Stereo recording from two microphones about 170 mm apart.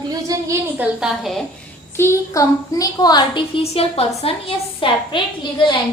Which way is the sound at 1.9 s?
15° left (ahead or behind).